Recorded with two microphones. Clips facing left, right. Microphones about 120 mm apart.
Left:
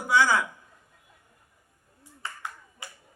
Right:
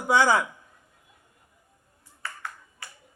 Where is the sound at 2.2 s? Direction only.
20° left (ahead or behind).